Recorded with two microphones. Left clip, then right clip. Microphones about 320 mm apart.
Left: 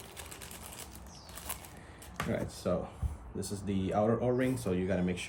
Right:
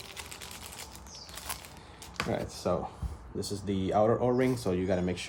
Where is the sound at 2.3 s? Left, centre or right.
Right.